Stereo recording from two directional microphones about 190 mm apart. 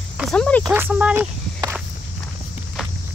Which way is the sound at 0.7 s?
10° right (ahead or behind).